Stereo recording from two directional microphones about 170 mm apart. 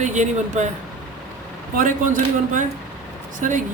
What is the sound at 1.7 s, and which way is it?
Speech, 50° right (ahead or behind).